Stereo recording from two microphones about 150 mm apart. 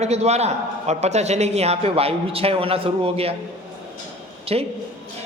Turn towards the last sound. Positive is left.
turn(degrees=-45)  # may be behind; listen again after turning